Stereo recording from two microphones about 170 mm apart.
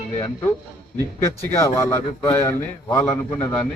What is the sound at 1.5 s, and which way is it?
A man's voice, 20° left (ahead or behind).